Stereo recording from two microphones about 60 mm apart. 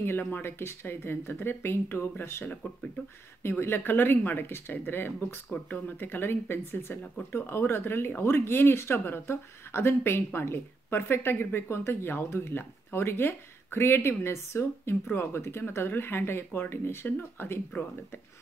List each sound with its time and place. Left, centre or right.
0.0 s speech: left
2.6 s speech: left